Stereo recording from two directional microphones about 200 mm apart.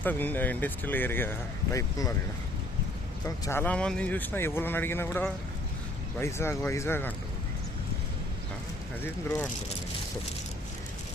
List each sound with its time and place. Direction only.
0.0 s speech: 10° left (ahead or behind)
3.2 s speech: 15° left (ahead or behind)
9.0 s speech: 10° left (ahead or behind)